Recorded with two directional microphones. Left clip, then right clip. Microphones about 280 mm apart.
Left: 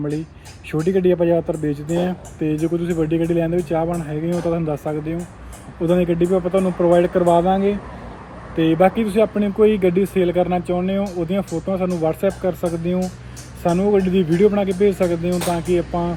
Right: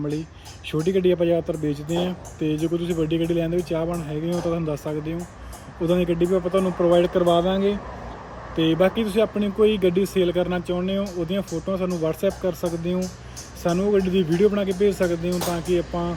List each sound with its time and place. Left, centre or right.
0.7 s speech: centre
6.7 s speech: right
7.3 s speech: centre